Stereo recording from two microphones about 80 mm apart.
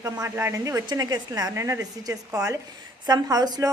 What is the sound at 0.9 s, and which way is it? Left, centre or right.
Speech, right.